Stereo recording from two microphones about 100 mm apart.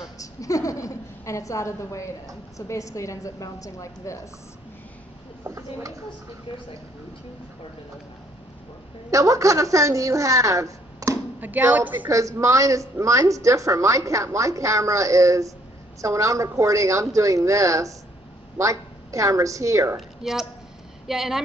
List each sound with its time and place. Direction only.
0.2 s a woman's voice: 35° left (ahead or behind)
5.4 s a woman's voice: 30° right (ahead or behind)
9.1 s a woman's voice: 35° right (ahead or behind)
11.3 s speech: 20° right (ahead or behind)
12.1 s a woman's voice: 35° right (ahead or behind)
20.0 s speech: 5° right (ahead or behind)